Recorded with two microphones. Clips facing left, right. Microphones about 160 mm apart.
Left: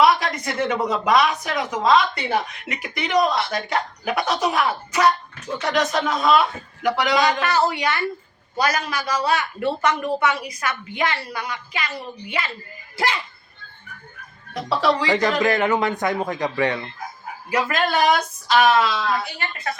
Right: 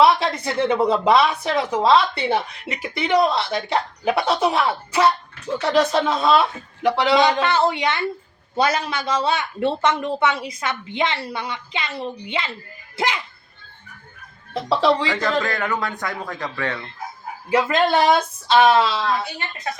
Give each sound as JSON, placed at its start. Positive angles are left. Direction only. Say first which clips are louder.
{"t": 0.0, "sound": "speech", "louder": "right 2 dB", "side_deg": -30}
{"t": 14.5, "sound": "speech", "louder": "right 3 dB", "side_deg": -25}
{"t": 15.0, "sound": "a man's voice", "louder": "left 3 dB", "side_deg": 15}
{"t": 17.5, "sound": "speech", "louder": "right 4 dB", "side_deg": -25}